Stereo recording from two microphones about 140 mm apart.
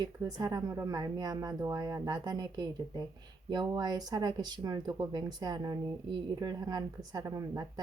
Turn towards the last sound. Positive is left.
turn(degrees=-25)  # may be behind; listen again after turning